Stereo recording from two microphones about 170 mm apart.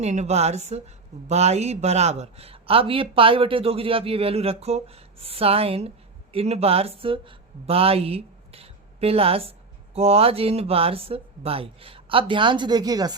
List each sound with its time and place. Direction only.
0.0 s a man's voice: 40° right (ahead or behind); by 13.1 s 20° right (ahead or behind)